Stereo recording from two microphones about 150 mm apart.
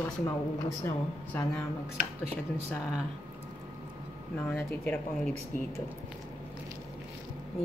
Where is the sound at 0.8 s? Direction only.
15° left (ahead or behind).